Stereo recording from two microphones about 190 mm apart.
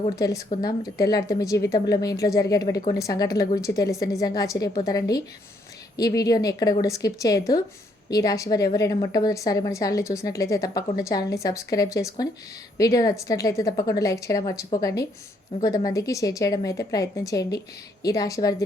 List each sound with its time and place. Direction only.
0.2 s a woman's voice: 20° left (ahead or behind)